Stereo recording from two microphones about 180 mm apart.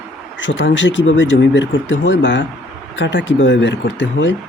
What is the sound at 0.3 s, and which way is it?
Speech, 90° left.